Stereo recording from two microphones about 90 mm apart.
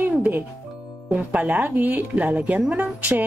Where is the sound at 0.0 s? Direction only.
20° right (ahead or behind).